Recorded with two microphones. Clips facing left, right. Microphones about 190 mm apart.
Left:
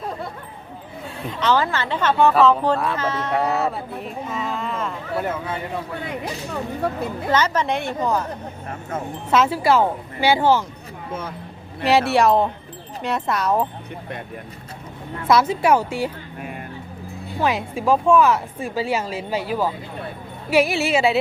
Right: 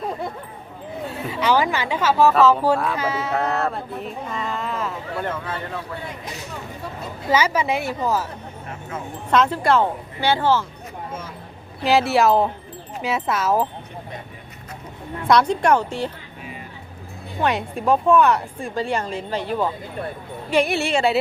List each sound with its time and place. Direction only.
1.0 s a woman's voice: 5° right (ahead or behind)
2.9 s music: 10° right (ahead or behind)
6.8 s speech: 60° left (ahead or behind)
7.3 s music: 10° right (ahead or behind)
9.3 s speech: 5° left (ahead or behind)
11.8 s music: centre (ahead or behind)
15.3 s speech: 5° left (ahead or behind)
17.4 s music: centre (ahead or behind)